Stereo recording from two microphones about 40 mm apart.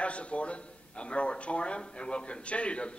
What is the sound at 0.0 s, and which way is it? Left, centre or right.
A man's voice, left.